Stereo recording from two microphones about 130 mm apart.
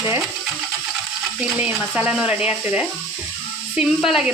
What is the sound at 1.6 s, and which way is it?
Speech, 15° right (ahead or behind).